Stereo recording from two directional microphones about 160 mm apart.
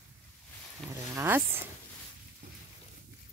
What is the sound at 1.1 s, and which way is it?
Speech, 15° right (ahead or behind).